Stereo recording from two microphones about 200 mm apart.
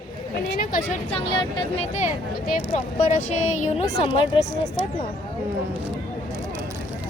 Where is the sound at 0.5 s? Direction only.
45° left (ahead or behind).